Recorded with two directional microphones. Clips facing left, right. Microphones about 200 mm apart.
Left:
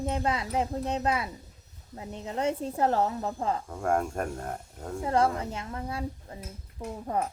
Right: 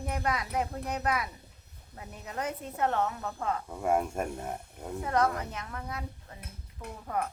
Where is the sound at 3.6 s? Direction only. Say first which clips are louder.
Right 3 dB; 5° right (ahead or behind).